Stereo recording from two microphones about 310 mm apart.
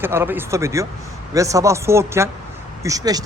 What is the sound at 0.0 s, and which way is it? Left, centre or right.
Speech, centre.